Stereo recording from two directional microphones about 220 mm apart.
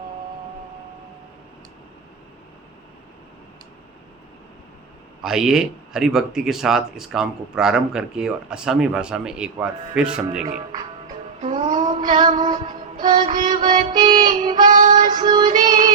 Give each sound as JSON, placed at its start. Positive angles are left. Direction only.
{"t": 5.2, "sound": "speech", "side_deg": -5}
{"t": 11.3, "sound": "female singing", "side_deg": -30}
{"t": 12.4, "sound": "music", "side_deg": -20}
{"t": 14.7, "sound": "child singing", "side_deg": -35}
{"t": 15.2, "sound": "music", "side_deg": -20}
{"t": 15.4, "sound": "music", "side_deg": -35}